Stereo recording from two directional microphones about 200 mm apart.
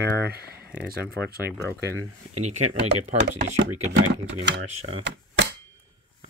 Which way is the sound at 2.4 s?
30° right (ahead or behind).